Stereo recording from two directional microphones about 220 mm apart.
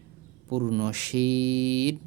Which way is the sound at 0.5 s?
50° right (ahead or behind).